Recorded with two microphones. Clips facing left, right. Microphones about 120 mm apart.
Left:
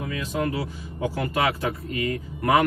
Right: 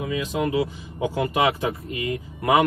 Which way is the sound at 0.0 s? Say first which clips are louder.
Right 2 dB; 20° right (ahead or behind).